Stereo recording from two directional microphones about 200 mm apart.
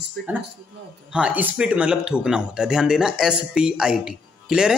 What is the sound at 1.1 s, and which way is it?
Speech, 5° right (ahead or behind).